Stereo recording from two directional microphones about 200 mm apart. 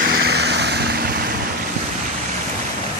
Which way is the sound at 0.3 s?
55° right (ahead or behind).